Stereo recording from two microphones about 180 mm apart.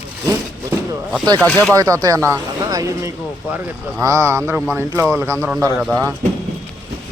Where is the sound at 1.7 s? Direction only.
20° right (ahead or behind).